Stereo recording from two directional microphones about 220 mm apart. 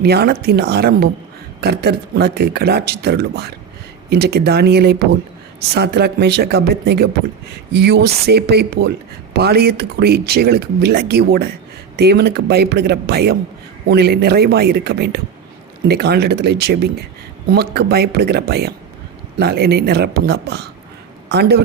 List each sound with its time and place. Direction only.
0.0 s speech: 45° right (ahead or behind)